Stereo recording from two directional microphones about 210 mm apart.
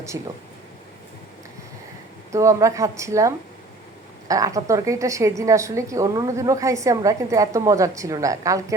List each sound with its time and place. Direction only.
0.1 s a woman's voice: 15° right (ahead or behind)
2.3 s a woman's voice: 15° right (ahead or behind)